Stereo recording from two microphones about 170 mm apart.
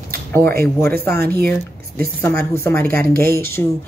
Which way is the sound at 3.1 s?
60° right (ahead or behind).